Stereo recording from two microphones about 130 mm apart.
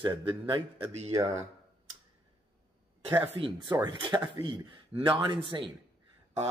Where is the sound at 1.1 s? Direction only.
25° right (ahead or behind).